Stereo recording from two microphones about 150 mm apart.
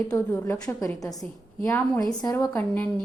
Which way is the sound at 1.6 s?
20° left (ahead or behind).